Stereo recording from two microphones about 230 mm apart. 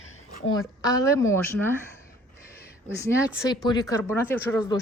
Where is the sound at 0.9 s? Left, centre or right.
Centre.